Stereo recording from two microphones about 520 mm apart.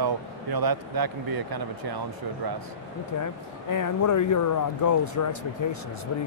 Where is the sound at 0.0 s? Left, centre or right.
Right.